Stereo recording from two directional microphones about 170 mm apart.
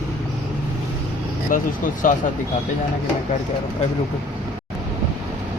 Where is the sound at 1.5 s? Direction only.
55° left (ahead or behind).